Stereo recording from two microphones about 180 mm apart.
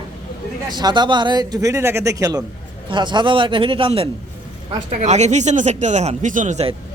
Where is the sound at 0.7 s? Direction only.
25° right (ahead or behind); by 6.7 s 40° right (ahead or behind).